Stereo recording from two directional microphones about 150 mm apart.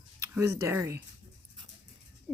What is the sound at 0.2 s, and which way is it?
Speech, 15° right (ahead or behind).